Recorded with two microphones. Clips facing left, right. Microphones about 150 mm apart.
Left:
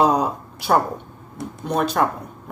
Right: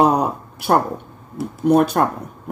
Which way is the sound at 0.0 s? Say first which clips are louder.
Right 2 dB; 55° right (ahead or behind).